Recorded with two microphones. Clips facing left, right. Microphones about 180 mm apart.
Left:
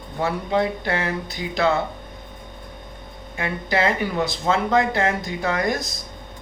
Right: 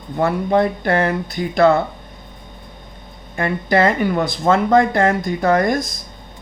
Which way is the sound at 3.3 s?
50° right (ahead or behind).